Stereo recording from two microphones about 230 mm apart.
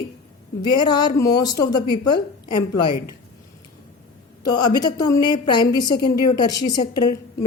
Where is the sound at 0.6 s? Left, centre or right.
Centre.